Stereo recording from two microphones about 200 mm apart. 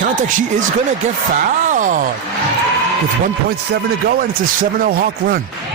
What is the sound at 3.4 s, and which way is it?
Speech, 50° right (ahead or behind).